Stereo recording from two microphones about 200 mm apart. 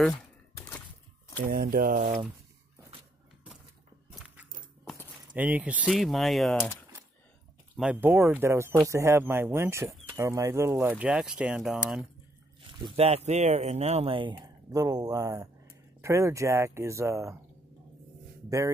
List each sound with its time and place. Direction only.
0.1 s a sound: 15° left (ahead or behind)
1.4 s speech: 45° right (ahead or behind)
4.1 s keys jangling: 5° right (ahead or behind)
5.3 s speech: 5° right (ahead or behind)
7.7 s speech: 5° right (ahead or behind)
12.9 s speech: 30° right (ahead or behind); by 17.4 s 15° right (ahead or behind)
18.5 s speech: 15° right (ahead or behind)